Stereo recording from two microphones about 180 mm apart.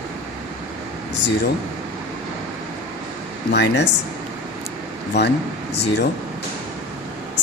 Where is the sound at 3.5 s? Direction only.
70° left (ahead or behind).